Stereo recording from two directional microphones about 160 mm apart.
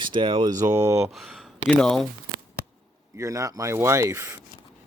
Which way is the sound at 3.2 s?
20° right (ahead or behind).